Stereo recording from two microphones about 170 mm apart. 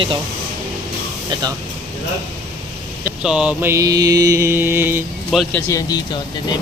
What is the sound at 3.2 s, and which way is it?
Mantra, 5° right (ahead or behind).